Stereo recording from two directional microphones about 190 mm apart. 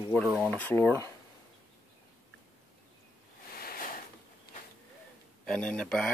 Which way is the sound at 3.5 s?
50° left (ahead or behind).